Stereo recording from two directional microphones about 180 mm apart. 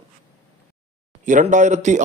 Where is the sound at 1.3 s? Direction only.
45° right (ahead or behind).